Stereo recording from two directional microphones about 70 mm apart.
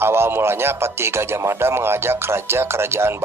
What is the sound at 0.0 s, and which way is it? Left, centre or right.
Speech, right.